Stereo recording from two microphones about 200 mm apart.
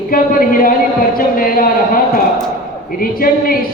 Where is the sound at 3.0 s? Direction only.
45° left (ahead or behind).